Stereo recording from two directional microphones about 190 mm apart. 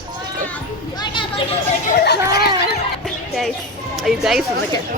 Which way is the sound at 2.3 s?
55° left (ahead or behind).